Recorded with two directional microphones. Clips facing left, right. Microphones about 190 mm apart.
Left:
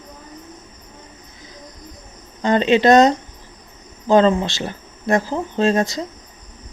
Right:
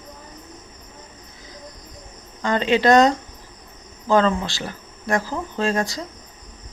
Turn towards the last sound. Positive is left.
turn(degrees=20)  # may be behind; listen again after turning